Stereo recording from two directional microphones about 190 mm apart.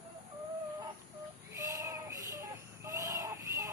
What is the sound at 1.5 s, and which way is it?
Child singing, 15° right (ahead or behind).